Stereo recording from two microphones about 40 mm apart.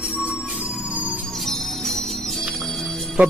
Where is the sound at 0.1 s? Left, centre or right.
Right.